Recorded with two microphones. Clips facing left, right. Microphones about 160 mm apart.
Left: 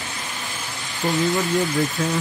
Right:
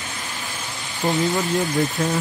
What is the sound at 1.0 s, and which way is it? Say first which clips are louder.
Speech: right 1 dB; 20° right (ahead or behind).